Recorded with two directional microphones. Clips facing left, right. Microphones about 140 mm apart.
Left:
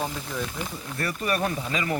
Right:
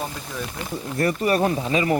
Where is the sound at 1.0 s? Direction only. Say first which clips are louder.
Right 7 dB; 30° right (ahead or behind).